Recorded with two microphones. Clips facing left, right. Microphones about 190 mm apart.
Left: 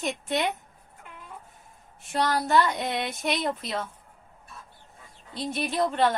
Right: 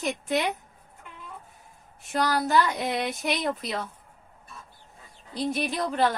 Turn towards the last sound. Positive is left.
turn(degrees=0)  # may be behind; listen again after turning